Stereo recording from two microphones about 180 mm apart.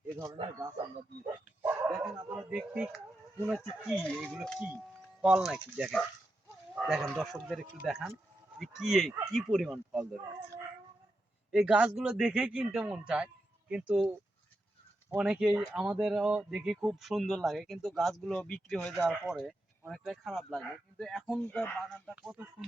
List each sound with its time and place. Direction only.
0.3 s speech: 25° right (ahead or behind); by 3.9 s 5° right (ahead or behind)
3.9 s speech: 5° left (ahead or behind)
11.5 s speech: 5° right (ahead or behind)
15.1 s speech: 5° right (ahead or behind)
22.1 s speech: 10° right (ahead or behind)